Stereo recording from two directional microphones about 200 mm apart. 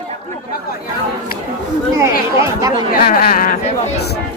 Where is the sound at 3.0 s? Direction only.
50° left (ahead or behind).